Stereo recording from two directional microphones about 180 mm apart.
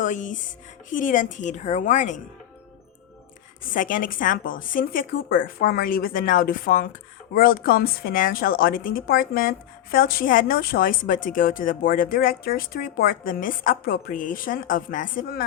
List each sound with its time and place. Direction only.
0.0 s a woman's voice: 45° left (ahead or behind)
3.7 s a woman's voice: 50° left (ahead or behind)